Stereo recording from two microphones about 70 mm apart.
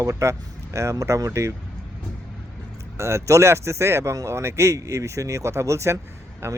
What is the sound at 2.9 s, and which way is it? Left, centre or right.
Speech, right.